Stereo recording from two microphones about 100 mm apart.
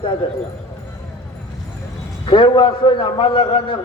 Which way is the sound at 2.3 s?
60° left (ahead or behind).